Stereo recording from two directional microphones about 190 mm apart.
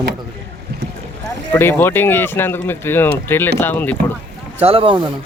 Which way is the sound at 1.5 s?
10° left (ahead or behind).